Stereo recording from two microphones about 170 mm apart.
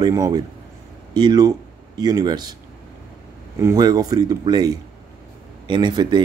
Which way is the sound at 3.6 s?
20° right (ahead or behind).